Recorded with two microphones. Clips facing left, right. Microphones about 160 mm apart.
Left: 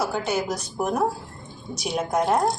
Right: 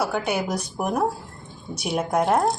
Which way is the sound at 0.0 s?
15° right (ahead or behind).